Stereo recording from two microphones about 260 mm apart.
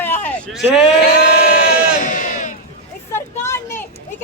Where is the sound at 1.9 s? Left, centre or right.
Left.